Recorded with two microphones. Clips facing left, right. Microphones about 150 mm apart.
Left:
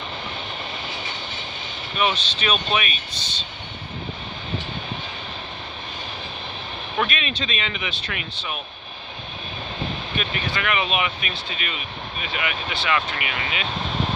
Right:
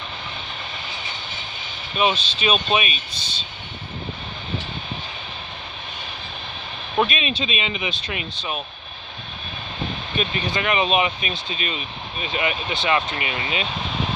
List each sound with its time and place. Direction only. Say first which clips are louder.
2.0 s speech: right 2 dB; 20° right (ahead or behind)
7.0 s speech: right 4 dB; 20° right (ahead or behind)
10.1 s speech: right 5 dB; 20° right (ahead or behind)